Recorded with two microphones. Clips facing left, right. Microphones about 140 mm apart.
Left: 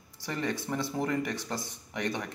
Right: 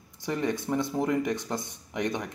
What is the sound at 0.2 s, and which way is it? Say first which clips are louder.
Speech: right 4 dB; 15° right (ahead or behind).